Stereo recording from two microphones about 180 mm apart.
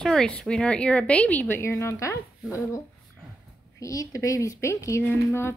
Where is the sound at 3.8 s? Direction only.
20° left (ahead or behind).